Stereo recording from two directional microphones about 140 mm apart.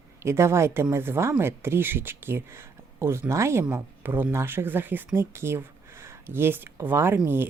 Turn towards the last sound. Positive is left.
turn(degrees=-15)  # may be behind; listen again after turning